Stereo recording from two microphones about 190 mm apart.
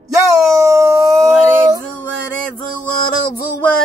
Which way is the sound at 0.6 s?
15° right (ahead or behind).